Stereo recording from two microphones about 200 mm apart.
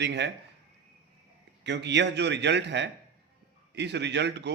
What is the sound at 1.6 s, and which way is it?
Speech, 60° right (ahead or behind).